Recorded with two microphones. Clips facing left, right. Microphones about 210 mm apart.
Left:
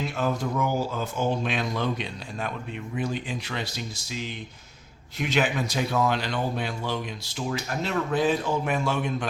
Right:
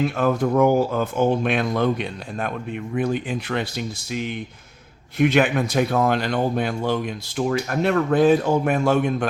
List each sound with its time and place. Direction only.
0.0 s a man's voice: 55° right (ahead or behind)